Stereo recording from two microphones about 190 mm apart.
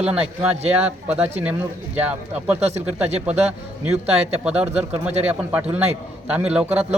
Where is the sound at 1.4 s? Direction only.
10° right (ahead or behind).